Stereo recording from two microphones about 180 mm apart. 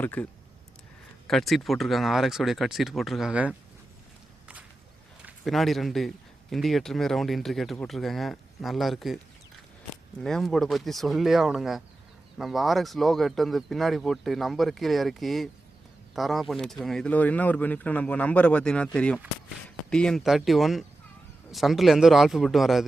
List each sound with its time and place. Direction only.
0.0 s speech: 10° left (ahead or behind)
1.3 s a man's voice: centre (ahead or behind)
5.2 s a man's voice: centre (ahead or behind)
10.2 s a man's voice: centre (ahead or behind)